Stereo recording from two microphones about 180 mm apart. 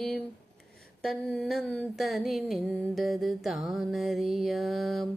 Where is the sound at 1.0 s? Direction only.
Centre (ahead or behind).